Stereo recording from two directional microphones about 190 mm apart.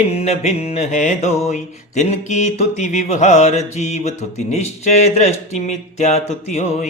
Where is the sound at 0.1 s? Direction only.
35° left (ahead or behind).